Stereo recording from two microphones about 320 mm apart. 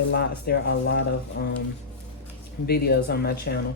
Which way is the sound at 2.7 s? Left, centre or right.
Left.